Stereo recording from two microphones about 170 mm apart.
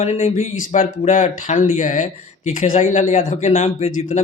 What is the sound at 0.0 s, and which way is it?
A man's voice, 40° left (ahead or behind).